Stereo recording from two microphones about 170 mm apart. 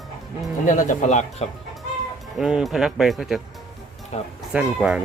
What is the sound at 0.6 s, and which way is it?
Speech, 50° left (ahead or behind).